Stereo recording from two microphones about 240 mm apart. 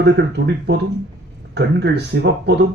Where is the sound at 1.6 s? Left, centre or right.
Right.